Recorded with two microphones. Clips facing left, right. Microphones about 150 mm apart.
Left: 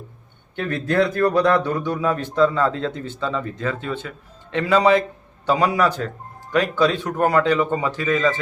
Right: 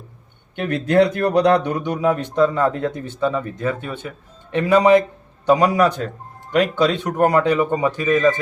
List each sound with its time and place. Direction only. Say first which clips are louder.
0.6 s a man's voice: right 4 dB; 20° right (ahead or behind)